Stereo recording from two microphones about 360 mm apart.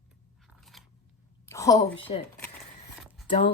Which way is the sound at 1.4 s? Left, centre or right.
Centre.